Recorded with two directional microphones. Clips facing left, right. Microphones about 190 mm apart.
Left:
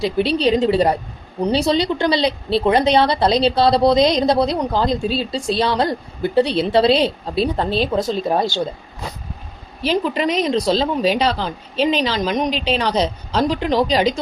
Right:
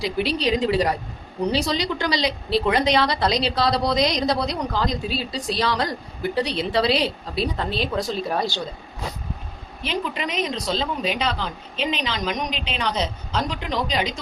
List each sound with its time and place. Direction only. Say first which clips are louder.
0.0 s a woman's voice: left 6 dB; 30° left (ahead or behind)
9.8 s speech: left 8 dB; 35° left (ahead or behind)